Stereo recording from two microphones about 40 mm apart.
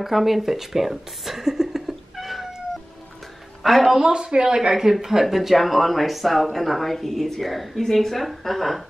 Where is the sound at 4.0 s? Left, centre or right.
Centre.